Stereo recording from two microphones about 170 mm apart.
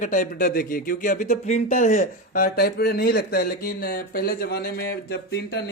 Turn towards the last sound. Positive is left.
turn(degrees=80)